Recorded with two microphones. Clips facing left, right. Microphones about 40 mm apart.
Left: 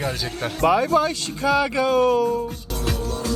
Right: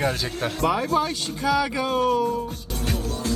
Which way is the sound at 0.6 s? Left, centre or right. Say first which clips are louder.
Left 5 dB; left.